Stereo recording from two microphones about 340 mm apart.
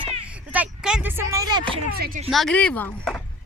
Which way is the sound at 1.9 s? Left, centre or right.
Right.